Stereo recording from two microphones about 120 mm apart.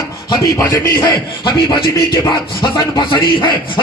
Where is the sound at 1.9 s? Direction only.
25° left (ahead or behind).